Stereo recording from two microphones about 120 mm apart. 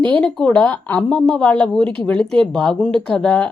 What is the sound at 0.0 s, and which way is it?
Speech, 10° left (ahead or behind).